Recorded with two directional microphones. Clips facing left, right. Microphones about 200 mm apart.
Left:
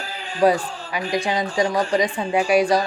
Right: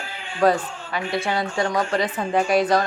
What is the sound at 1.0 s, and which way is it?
Speech, 35° left (ahead or behind).